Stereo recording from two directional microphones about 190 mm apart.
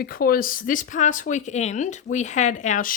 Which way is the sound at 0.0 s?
50° left (ahead or behind).